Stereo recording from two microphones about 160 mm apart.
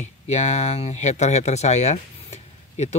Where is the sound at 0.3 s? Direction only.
45° left (ahead or behind).